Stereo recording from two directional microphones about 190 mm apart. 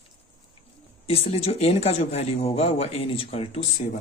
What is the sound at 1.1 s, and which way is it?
A man's voice, 30° left (ahead or behind).